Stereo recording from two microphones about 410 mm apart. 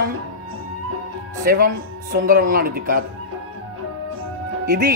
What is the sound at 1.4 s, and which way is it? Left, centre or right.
Speech, centre.